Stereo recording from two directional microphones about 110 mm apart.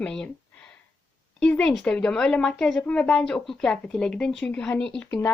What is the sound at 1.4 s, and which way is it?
Speech, 10° left (ahead or behind).